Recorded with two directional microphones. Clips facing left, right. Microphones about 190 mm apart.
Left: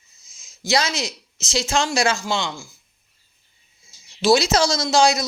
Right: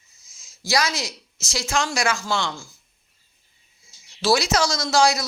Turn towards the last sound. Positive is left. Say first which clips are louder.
# left 2 dB
turn(degrees=20)  # may be behind; listen again after turning